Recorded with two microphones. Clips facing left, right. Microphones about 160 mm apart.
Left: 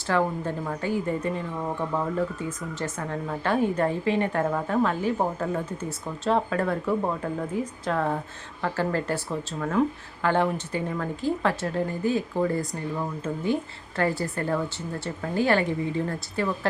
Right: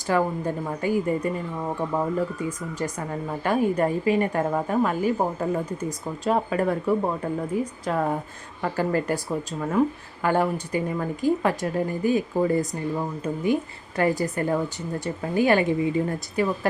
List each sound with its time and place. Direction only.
0.1 s speech: 10° right (ahead or behind)